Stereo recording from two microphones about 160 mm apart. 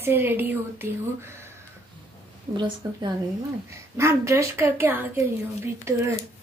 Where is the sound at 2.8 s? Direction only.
25° right (ahead or behind).